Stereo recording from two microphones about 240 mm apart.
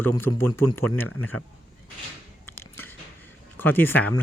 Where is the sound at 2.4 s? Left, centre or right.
Centre.